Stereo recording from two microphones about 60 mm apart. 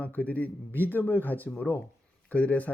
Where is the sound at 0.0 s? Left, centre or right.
Left.